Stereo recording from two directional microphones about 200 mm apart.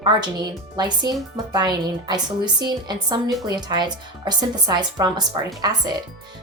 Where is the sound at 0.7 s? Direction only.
20° right (ahead or behind).